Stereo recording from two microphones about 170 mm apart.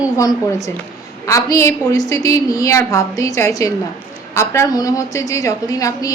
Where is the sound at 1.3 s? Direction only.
20° left (ahead or behind).